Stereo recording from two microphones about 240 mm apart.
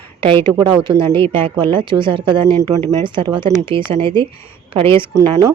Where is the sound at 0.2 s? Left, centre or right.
Right.